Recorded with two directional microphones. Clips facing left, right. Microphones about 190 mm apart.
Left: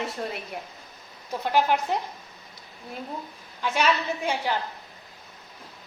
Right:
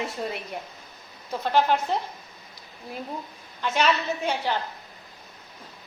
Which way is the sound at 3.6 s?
10° left (ahead or behind).